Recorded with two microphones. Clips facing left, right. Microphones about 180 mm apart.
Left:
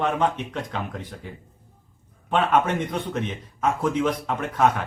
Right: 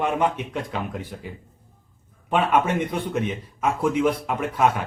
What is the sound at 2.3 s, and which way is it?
A man's voice, 10° right (ahead or behind).